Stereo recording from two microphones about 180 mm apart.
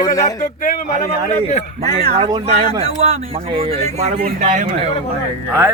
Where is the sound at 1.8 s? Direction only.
35° right (ahead or behind).